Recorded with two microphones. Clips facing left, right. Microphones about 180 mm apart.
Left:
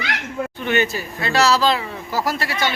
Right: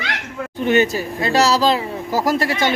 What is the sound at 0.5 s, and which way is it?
Speech, 40° right (ahead or behind).